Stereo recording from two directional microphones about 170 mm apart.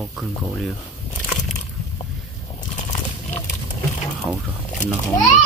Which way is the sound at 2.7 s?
45° left (ahead or behind).